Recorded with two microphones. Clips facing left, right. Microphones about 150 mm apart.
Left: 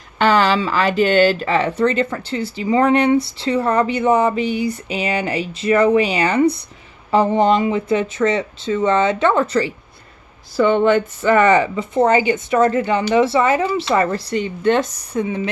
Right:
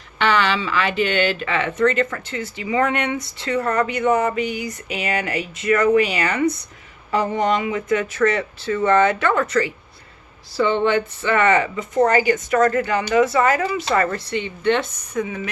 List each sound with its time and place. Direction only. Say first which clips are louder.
0.2 s speech: left 4 dB; 40° left (ahead or behind)
10.6 s speech: left 4 dB; 45° left (ahead or behind); by 15.4 s 30° left (ahead or behind)